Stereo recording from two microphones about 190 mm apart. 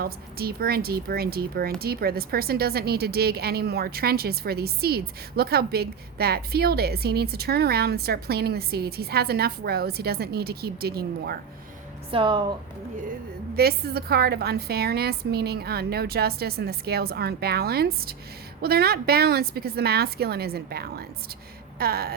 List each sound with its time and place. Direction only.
0.0 s speech: 55° right (ahead or behind)
12.1 s a woman's voice: 25° right (ahead or behind)
13.6 s speech: 55° right (ahead or behind)